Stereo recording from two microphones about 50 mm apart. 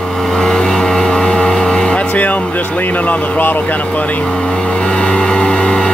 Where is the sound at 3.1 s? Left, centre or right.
Left.